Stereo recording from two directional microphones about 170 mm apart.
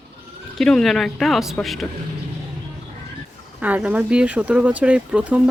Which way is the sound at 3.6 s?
10° right (ahead or behind).